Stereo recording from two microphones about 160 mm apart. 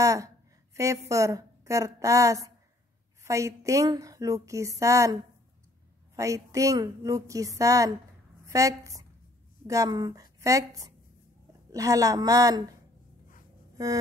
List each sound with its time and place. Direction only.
0.0 s a woman's voice: 20° right (ahead or behind)